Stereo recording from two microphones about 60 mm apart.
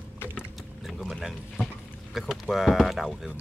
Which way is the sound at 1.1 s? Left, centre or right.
Centre.